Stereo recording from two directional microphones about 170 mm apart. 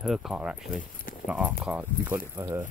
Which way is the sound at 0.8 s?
55° left (ahead or behind).